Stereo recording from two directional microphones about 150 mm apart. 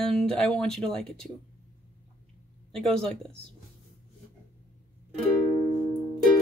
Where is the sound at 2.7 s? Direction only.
5° left (ahead or behind).